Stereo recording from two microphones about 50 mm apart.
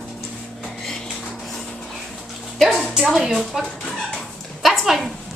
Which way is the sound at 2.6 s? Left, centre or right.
Centre.